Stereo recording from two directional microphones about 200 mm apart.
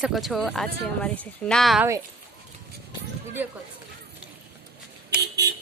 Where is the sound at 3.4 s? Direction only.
10° right (ahead or behind).